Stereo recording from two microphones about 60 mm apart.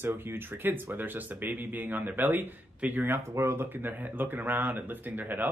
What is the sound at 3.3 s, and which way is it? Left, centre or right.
Speech, right.